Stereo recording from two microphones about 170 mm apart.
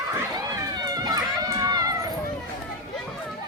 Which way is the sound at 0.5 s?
20° right (ahead or behind).